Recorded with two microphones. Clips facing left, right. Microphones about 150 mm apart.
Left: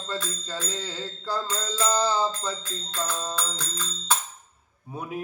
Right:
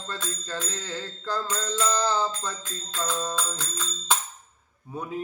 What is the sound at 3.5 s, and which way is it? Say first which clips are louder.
Music: even; 15° right (ahead or behind).